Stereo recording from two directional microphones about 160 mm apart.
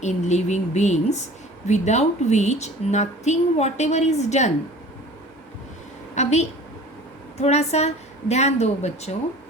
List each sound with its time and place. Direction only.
0.0 s a woman's voice: 45° left (ahead or behind)
6.1 s a woman's voice: 45° left (ahead or behind)